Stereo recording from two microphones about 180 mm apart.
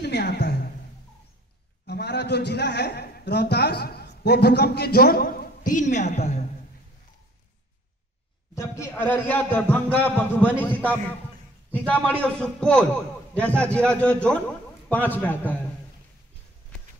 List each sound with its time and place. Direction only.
0.0 s a man's voice: 65° left (ahead or behind)
1.9 s a man's voice: 65° left (ahead or behind); by 6.4 s 40° left (ahead or behind)
8.5 s a man's voice: 15° left (ahead or behind)